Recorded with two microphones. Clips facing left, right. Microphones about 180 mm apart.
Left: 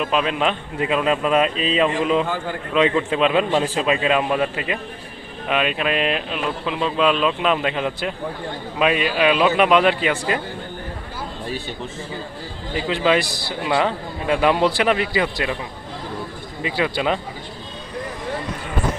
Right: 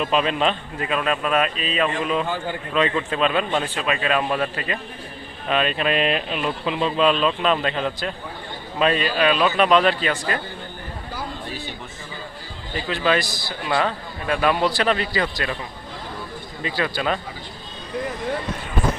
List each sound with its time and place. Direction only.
0.0 s speech: 5° left (ahead or behind)
0.8 s a man's voice: 20° left (ahead or behind)
12.7 s a man's voice: 20° left (ahead or behind)
16.6 s a man's voice: 15° left (ahead or behind)